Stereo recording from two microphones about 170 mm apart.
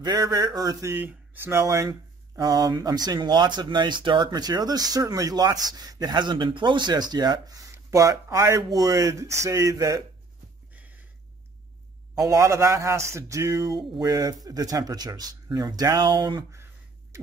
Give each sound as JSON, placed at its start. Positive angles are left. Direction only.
{"t": 0.0, "sound": "speech", "side_deg": -20}
{"t": 12.2, "sound": "speech", "side_deg": -20}